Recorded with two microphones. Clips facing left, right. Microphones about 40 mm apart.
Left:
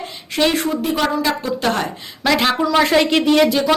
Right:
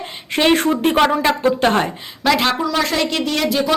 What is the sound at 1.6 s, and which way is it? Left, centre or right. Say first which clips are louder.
Speech: right 2 dB; right.